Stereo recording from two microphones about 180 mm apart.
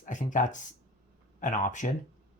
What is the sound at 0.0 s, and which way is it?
Speech, 45° left (ahead or behind).